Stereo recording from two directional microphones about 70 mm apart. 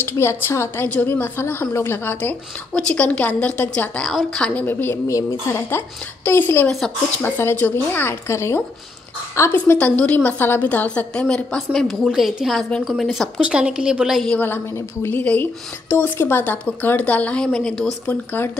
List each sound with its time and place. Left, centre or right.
0.0 s a woman's voice: left
2.7 s a woman's voice: centre
5.0 s a woman's voice: left
9.8 s a woman's voice: centre
11.5 s a woman's voice: centre
12.1 s a woman's voice: centre
13.4 s a woman's voice: centre
14.4 s a woman's voice: left
16.6 s speech: left
18.0 s a woman's voice: left